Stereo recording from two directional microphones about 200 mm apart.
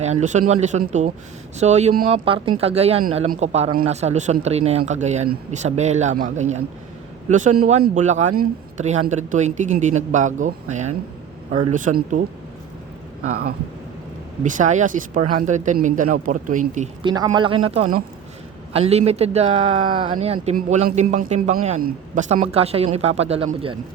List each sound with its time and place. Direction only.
0.0 s speech: 35° right (ahead or behind)
14.4 s speech: 40° right (ahead or behind)
17.0 s speech: 20° right (ahead or behind)